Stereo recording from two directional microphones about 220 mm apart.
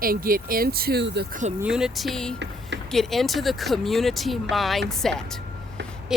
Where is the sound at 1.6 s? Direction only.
5° right (ahead or behind).